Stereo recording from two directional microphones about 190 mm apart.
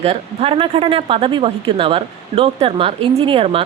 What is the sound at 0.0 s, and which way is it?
Speech, 30° right (ahead or behind).